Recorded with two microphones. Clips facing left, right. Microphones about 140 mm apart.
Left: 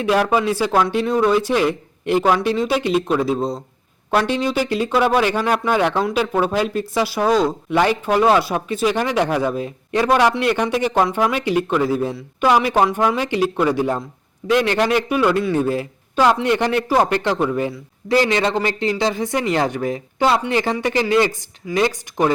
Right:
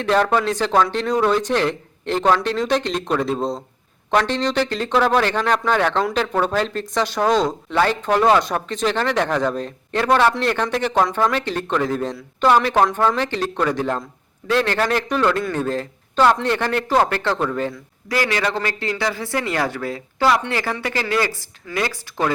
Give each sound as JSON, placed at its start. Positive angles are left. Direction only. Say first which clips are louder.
{"t": 0.0, "sound": "speech", "louder": "left 1 dB", "side_deg": 10}